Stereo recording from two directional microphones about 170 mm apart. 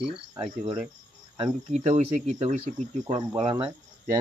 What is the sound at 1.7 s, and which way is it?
Speech, 40° right (ahead or behind).